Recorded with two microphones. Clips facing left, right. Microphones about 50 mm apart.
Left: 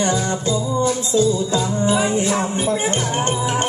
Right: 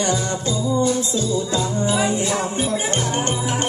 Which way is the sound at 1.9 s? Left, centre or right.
Left.